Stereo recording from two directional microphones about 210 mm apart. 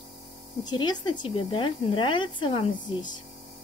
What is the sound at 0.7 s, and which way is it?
Speech, 20° left (ahead or behind).